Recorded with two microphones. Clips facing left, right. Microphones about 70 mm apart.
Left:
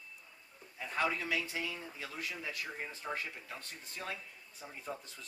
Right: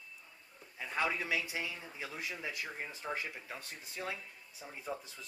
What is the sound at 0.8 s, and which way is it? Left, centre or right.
Speech, centre.